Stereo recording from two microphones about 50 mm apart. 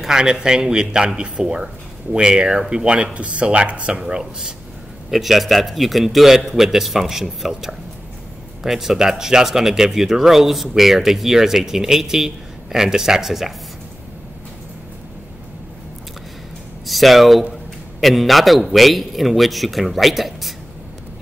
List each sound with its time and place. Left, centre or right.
0.0 s speech: centre
4.0 s a man's voice: centre
16.8 s a man's voice: centre